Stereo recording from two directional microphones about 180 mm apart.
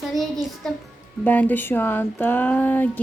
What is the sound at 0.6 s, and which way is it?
Speech, centre (ahead or behind).